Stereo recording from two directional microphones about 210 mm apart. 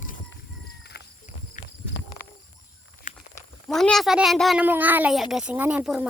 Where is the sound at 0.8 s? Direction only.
50° left (ahead or behind).